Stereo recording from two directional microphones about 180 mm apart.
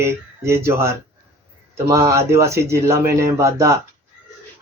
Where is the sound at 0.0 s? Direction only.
15° right (ahead or behind).